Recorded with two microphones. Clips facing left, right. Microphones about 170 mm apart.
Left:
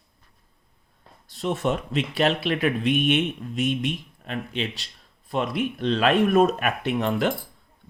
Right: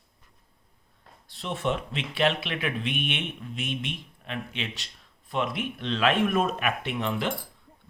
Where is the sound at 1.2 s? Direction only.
45° left (ahead or behind).